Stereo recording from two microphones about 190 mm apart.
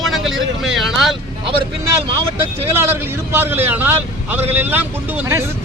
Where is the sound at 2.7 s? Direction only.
10° right (ahead or behind).